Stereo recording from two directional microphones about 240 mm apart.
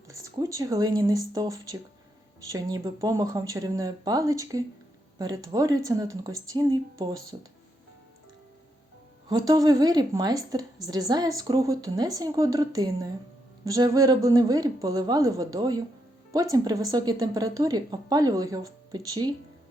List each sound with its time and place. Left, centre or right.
0.2 s a woman's voice: centre
9.3 s a woman's voice: centre